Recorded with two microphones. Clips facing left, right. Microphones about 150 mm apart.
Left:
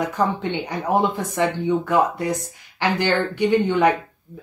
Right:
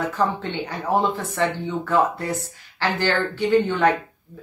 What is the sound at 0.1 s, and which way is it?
Speech, 15° left (ahead or behind).